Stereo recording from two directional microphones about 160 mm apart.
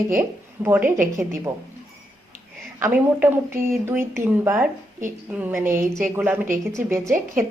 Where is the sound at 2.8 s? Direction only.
15° right (ahead or behind).